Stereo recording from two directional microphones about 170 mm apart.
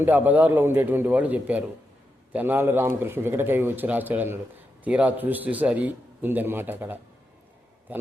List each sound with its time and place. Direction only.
0.0 s a man's voice: 10° right (ahead or behind)